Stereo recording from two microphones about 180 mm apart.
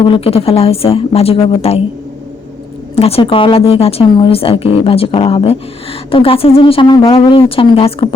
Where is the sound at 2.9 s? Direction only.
35° left (ahead or behind).